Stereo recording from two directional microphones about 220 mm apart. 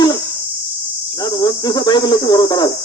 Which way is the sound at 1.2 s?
15° left (ahead or behind).